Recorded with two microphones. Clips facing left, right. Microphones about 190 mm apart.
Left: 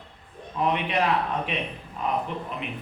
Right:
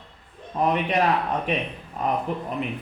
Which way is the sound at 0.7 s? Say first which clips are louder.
Right 2 dB; 40° right (ahead or behind).